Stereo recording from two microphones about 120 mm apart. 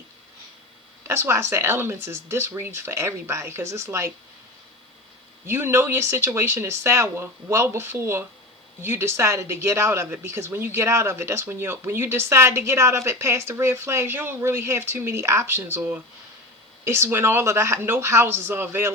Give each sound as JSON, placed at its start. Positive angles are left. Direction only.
{"t": 1.0, "sound": "speech", "side_deg": -20}
{"t": 5.5, "sound": "speech", "side_deg": -20}